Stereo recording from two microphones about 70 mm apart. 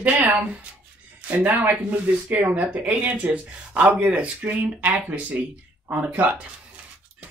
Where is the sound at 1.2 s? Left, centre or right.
Right.